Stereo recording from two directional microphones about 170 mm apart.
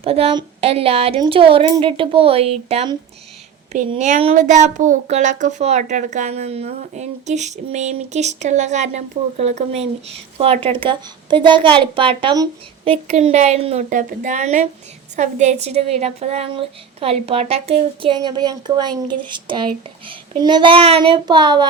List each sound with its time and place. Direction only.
0.0 s a woman's voice: 35° right (ahead or behind)
3.7 s a woman's voice: 45° right (ahead or behind); by 21.7 s 25° right (ahead or behind)